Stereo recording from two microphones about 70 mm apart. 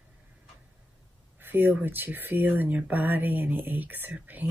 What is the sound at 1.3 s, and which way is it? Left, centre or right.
Speech, right.